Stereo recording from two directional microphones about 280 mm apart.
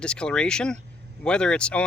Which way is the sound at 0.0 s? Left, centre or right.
Centre.